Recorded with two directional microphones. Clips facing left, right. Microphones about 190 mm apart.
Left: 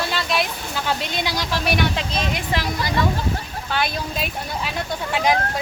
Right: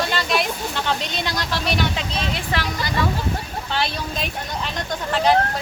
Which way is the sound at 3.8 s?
5° left (ahead or behind).